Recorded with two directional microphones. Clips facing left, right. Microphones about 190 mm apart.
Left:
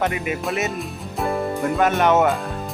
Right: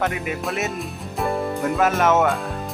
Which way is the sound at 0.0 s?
Centre (ahead or behind).